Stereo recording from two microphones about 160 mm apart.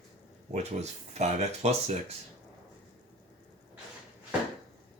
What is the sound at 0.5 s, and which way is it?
Speech, 45° right (ahead or behind).